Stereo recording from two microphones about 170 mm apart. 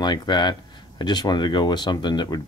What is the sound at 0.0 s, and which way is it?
Speech, 25° left (ahead or behind).